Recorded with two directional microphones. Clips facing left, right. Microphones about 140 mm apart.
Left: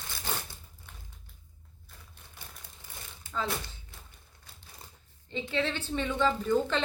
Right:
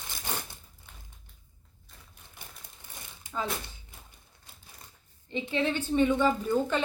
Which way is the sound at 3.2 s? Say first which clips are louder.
Even; 15° right (ahead or behind).